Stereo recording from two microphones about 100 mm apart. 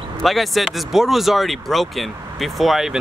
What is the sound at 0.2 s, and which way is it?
Speech, centre (ahead or behind).